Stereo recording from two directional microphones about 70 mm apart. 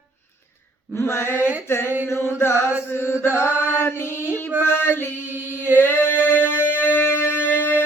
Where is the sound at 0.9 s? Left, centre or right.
Left.